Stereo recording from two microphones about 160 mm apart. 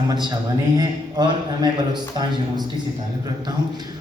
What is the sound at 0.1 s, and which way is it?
A man's voice, 25° right (ahead or behind).